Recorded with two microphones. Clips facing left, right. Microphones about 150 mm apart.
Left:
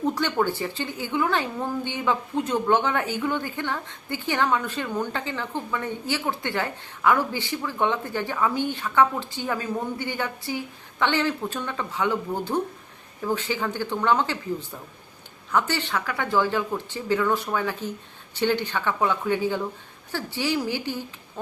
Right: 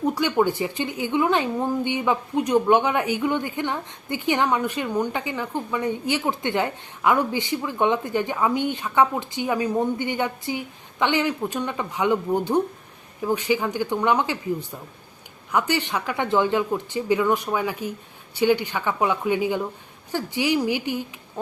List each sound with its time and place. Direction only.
0.0 s a woman's voice: 10° right (ahead or behind)